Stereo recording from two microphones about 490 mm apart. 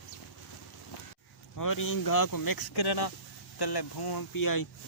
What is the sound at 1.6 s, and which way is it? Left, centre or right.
Speech, left.